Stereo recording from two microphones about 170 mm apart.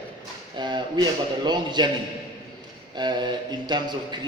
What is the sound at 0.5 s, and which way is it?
A man's voice, 25° right (ahead or behind).